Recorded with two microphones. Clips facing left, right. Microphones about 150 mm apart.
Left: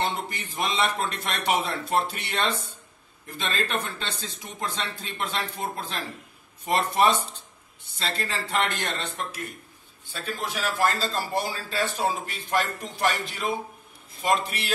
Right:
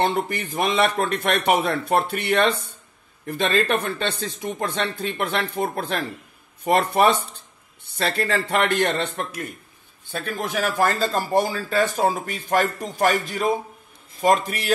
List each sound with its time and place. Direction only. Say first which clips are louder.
0.0 s speech: right 7 dB; 60° right (ahead or behind)
10.1 s a man's voice: right 6 dB; 55° right (ahead or behind)